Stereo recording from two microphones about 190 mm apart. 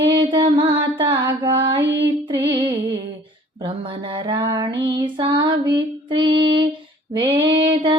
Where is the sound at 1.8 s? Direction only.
65° right (ahead or behind).